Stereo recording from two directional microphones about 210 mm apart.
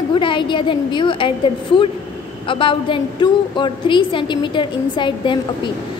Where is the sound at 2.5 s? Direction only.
25° left (ahead or behind).